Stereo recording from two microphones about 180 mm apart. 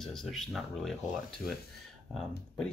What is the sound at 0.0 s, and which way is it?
Speech, centre (ahead or behind).